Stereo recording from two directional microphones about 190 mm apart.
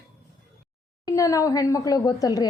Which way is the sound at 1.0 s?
15° left (ahead or behind).